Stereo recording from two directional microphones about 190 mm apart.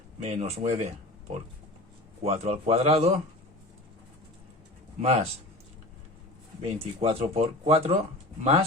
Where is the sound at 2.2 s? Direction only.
35° right (ahead or behind).